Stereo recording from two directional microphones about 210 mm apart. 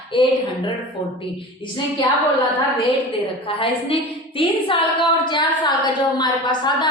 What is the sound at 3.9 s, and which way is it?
A woman's voice, 25° left (ahead or behind).